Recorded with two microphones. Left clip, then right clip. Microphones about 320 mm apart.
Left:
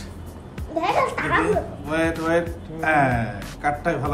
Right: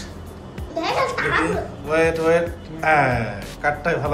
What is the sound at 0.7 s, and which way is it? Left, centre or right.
Speech, left.